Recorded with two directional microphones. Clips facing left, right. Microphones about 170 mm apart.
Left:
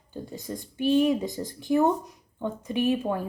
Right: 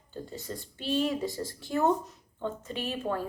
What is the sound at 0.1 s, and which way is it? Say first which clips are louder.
A woman's voice: left 3 dB; 15° left (ahead or behind).